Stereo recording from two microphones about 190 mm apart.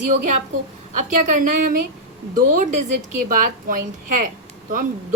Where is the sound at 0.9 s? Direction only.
40° right (ahead or behind).